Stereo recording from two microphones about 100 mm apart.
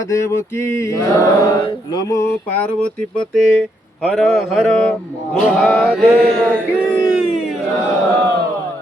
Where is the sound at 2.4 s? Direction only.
15° left (ahead or behind).